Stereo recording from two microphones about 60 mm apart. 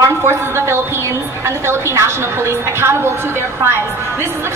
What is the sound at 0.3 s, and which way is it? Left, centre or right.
A woman's voice, right.